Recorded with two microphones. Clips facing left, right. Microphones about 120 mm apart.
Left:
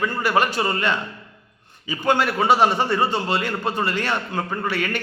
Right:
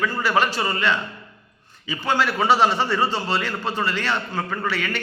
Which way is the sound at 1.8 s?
50° left (ahead or behind).